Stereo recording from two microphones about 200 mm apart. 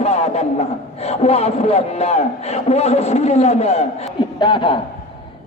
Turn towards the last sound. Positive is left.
turn(degrees=25)  # may be behind; listen again after turning